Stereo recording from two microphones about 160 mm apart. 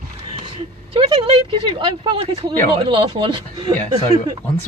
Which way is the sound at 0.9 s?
35° right (ahead or behind).